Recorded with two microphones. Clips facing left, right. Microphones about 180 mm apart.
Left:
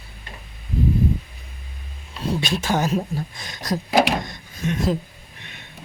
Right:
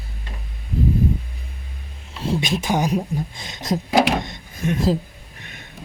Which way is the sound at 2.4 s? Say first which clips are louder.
Even; 15° right (ahead or behind).